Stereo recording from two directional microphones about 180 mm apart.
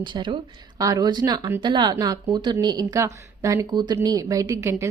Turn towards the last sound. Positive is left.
turn(degrees=-15)  # may be behind; listen again after turning